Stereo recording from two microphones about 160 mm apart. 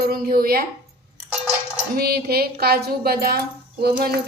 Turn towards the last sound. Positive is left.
turn(degrees=-75)  # may be behind; listen again after turning